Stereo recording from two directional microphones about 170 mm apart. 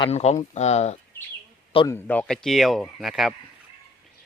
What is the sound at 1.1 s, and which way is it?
Bird, 10° left (ahead or behind).